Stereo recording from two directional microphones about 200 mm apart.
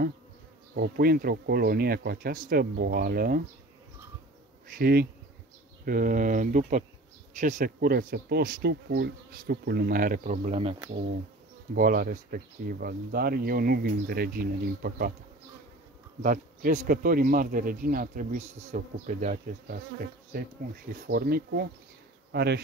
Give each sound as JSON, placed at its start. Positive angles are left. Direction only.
{"t": 0.7, "sound": "speech", "side_deg": -50}
{"t": 4.6, "sound": "speech", "side_deg": -50}
{"t": 11.7, "sound": "speech", "side_deg": -45}
{"t": 16.2, "sound": "speech", "side_deg": -40}
{"t": 21.1, "sound": "speech", "side_deg": -50}